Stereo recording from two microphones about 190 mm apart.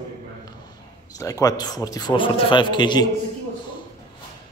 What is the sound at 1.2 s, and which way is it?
Speech, 20° left (ahead or behind).